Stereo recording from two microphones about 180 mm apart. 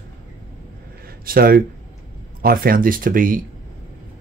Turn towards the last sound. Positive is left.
turn(degrees=-50)  # may be behind; listen again after turning